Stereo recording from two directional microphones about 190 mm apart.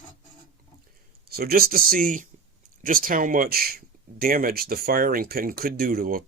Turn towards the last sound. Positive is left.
turn(degrees=-50)  # may be behind; listen again after turning